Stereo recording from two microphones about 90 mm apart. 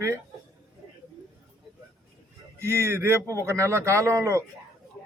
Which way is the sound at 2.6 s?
30° right (ahead or behind).